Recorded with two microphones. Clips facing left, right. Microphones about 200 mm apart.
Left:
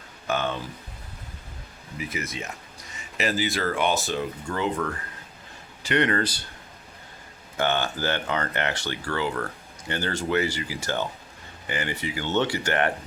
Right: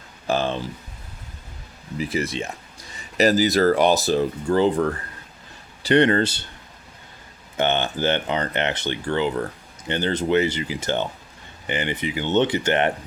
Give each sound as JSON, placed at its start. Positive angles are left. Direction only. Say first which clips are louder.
{"t": 0.3, "sound": "speech", "louder": "right 4 dB", "side_deg": -30}
{"t": 2.0, "sound": "speech", "louder": "right 8 dB", "side_deg": -35}
{"t": 7.5, "sound": "speech", "louder": "right 3 dB", "side_deg": -20}